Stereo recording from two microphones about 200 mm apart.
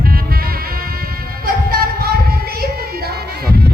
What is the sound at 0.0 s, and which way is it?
Music, 50° right (ahead or behind).